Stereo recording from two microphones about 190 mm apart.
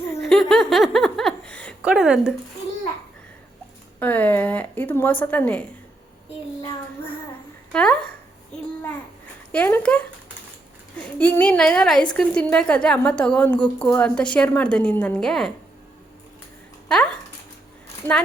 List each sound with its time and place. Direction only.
0.2 s laughter: centre (ahead or behind)
1.8 s a sound: 5° right (ahead or behind)
4.0 s a woman's voice: 10° left (ahead or behind)
7.7 s a woman's voice: 5° left (ahead or behind)
9.5 s a woman's voice: 10° left (ahead or behind)
11.0 s a woman's voice: 10° left (ahead or behind)
18.0 s a woman's voice: 10° left (ahead or behind)